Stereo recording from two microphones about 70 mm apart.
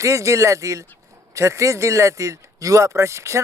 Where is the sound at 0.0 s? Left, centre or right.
Right.